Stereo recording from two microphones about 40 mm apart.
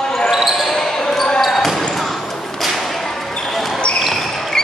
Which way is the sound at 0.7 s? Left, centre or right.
Centre.